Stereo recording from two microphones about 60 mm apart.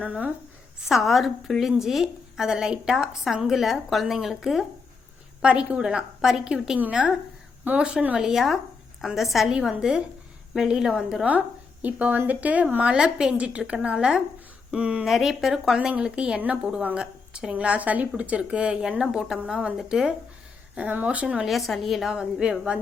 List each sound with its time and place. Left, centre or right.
0.0 s a woman's voice: right
0.9 s a woman's voice: centre
5.4 s a woman's voice: centre
6.7 s a woman's voice: right
8.1 s a woman's voice: centre
11.3 s a woman's voice: right
15.0 s a woman's voice: centre
20.7 s a woman's voice: right
21.4 s speech: centre
22.1 s a woman's voice: centre